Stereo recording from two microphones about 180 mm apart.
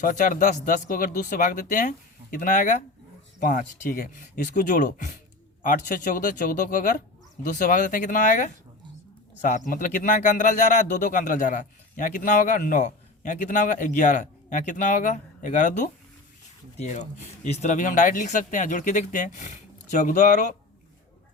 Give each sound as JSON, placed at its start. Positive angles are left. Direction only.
{"t": 0.0, "sound": "speech", "side_deg": 45}